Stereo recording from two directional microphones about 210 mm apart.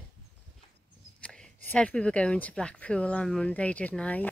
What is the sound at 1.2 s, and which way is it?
Speech, 5° left (ahead or behind).